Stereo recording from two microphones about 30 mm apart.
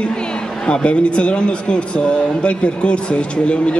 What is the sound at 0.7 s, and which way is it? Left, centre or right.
A man's voice, left.